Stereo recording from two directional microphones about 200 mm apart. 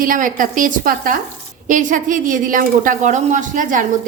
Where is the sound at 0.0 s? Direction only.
45° right (ahead or behind).